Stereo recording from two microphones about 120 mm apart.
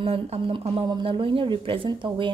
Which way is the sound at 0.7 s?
40° right (ahead or behind).